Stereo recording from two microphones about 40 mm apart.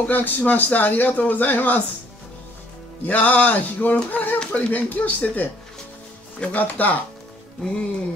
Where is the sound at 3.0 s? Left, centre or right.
Left.